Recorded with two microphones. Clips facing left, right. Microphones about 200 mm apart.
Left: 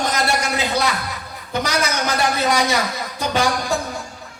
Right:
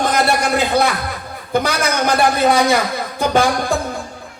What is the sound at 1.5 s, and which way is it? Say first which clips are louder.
Music: right 4 dB; 55° right (ahead or behind).